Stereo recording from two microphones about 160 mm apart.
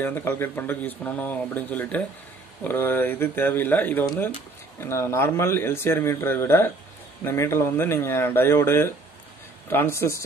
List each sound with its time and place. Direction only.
0.0 s speech: 15° left (ahead or behind)